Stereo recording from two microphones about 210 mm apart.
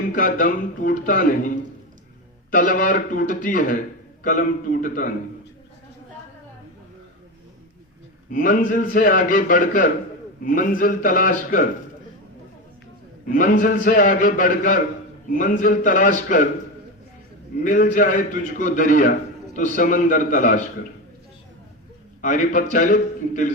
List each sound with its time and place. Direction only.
0.1 s a man's voice: 40° left (ahead or behind)
8.3 s a man's voice: 40° left (ahead or behind)
13.2 s a man's voice: 40° left (ahead or behind)
17.6 s a man's voice: 40° left (ahead or behind)
22.2 s a man's voice: 40° left (ahead or behind)